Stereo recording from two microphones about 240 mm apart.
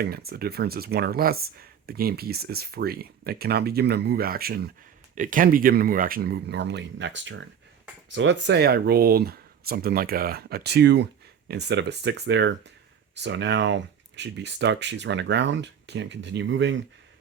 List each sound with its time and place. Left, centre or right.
0.0 s speech: right